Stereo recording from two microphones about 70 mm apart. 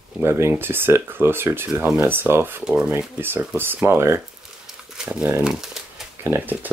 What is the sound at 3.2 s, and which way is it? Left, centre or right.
Speech, right.